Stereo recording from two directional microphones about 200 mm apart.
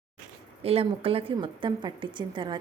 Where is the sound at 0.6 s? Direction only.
30° right (ahead or behind).